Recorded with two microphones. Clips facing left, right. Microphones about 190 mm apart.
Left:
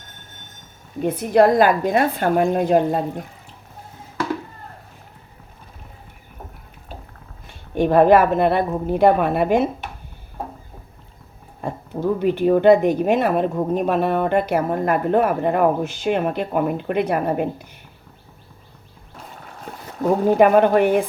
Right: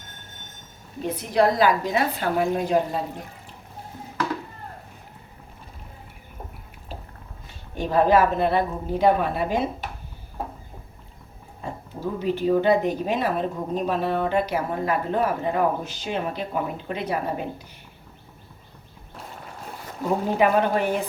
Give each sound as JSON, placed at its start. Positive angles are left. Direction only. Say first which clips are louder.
{"t": 1.0, "sound": "a woman's voice", "louder": "left 6 dB", "side_deg": 50}
{"t": 7.8, "sound": "a woman's voice", "louder": "left 5 dB", "side_deg": 55}
{"t": 11.6, "sound": "oink", "louder": "left 6 dB", "side_deg": 55}
{"t": 12.2, "sound": "a woman's voice", "louder": "left 5 dB", "side_deg": 60}
{"t": 20.4, "sound": "a woman's voice", "louder": "left 7 dB", "side_deg": 55}